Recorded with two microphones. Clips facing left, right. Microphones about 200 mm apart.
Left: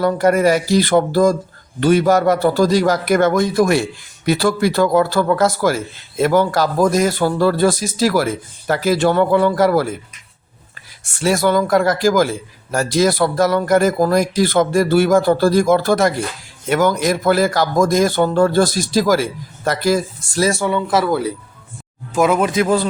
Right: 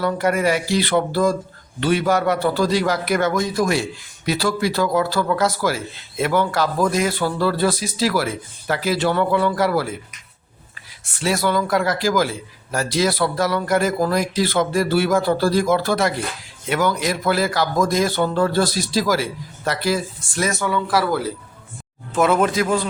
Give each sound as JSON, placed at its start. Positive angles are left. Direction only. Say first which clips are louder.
{"t": 0.0, "sound": "speech", "louder": "left 5 dB", "side_deg": 40}
{"t": 11.0, "sound": "speech", "louder": "left 5 dB", "side_deg": 45}
{"t": 22.1, "sound": "speech", "louder": "left 2 dB", "side_deg": 10}
{"t": 22.6, "sound": "speech", "louder": "left 4 dB", "side_deg": 35}